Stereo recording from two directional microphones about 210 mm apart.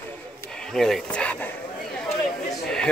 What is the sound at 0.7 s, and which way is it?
Speech, centre (ahead or behind).